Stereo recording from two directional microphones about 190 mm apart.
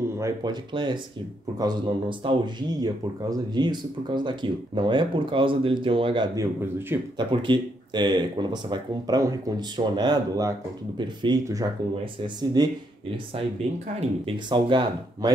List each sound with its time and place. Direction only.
0.2 s speech: 20° right (ahead or behind)
7.2 s speech: 25° right (ahead or behind)
14.2 s speech: 25° right (ahead or behind)